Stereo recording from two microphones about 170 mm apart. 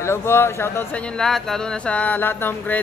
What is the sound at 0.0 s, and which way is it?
Speech, 15° left (ahead or behind).